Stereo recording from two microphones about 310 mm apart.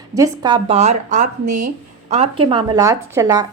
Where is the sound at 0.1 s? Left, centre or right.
Centre.